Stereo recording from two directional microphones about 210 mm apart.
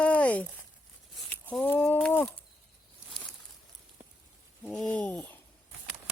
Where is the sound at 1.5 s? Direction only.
10° left (ahead or behind).